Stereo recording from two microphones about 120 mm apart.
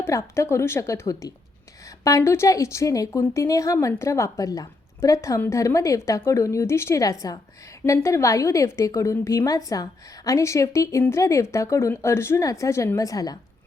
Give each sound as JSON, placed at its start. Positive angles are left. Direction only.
{"t": 0.0, "sound": "a woman's voice", "side_deg": 25}